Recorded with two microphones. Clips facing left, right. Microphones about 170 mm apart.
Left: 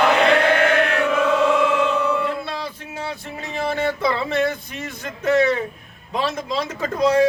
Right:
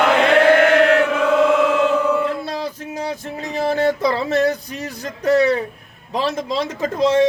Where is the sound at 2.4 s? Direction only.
40° right (ahead or behind).